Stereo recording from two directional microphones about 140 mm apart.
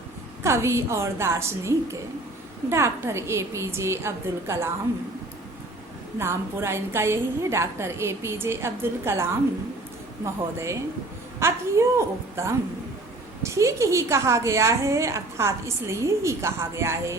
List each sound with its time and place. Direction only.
0.4 s a woman's voice: 20° right (ahead or behind)
6.1 s a woman's voice: 20° right (ahead or behind)
11.3 s a woman's voice: 20° right (ahead or behind)